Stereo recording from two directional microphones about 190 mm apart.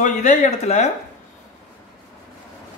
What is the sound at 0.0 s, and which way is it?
Speech, 40° left (ahead or behind).